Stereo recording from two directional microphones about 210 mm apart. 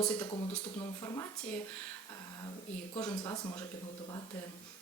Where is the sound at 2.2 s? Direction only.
15° left (ahead or behind).